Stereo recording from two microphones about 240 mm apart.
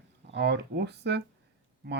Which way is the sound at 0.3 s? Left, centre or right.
Right.